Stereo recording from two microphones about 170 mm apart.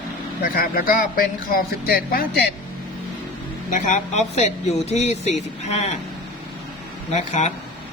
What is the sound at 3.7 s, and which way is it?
Speech, 45° left (ahead or behind).